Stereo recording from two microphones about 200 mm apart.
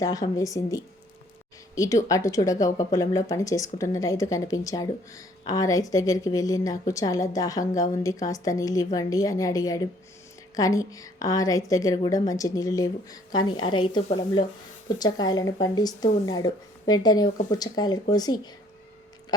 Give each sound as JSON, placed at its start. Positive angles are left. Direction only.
{"t": 0.0, "sound": "speech", "side_deg": 15}